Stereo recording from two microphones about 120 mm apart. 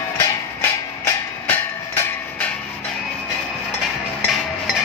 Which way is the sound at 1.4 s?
15° left (ahead or behind).